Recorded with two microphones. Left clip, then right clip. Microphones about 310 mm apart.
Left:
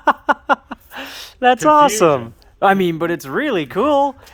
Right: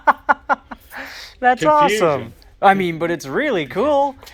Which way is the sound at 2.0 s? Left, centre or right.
Left.